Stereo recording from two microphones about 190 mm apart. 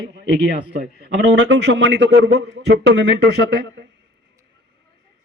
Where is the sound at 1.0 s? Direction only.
65° right (ahead or behind).